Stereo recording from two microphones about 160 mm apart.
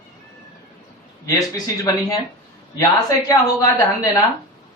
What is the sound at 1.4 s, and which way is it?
Speech, 25° left (ahead or behind).